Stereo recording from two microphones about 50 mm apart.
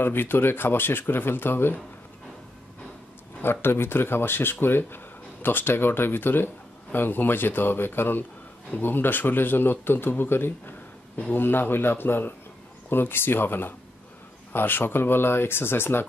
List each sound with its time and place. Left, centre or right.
0.0 s speech: left
3.4 s speech: left